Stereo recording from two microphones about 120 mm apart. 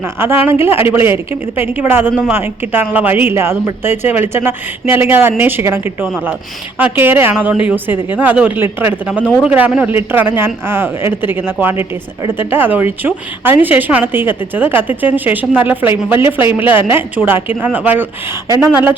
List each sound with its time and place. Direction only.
0.2 s speech: 20° right (ahead or behind)